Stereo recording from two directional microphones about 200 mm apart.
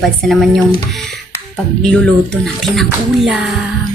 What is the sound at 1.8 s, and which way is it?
Speech, 5° left (ahead or behind).